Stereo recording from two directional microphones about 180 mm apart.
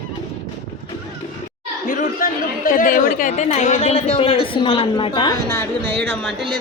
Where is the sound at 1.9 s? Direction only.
50° left (ahead or behind); by 5.4 s 25° left (ahead or behind).